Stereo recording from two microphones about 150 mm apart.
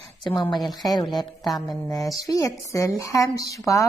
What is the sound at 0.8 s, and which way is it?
A woman's voice, 25° left (ahead or behind).